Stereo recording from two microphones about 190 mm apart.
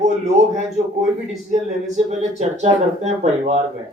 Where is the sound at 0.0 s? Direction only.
35° right (ahead or behind).